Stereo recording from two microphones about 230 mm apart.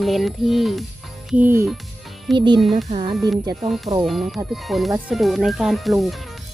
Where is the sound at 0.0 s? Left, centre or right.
Centre.